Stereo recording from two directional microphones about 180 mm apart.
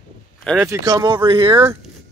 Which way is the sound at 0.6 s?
20° right (ahead or behind).